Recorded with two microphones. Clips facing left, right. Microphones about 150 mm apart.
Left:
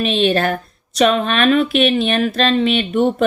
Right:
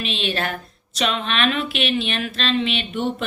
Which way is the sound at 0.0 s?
45° left (ahead or behind).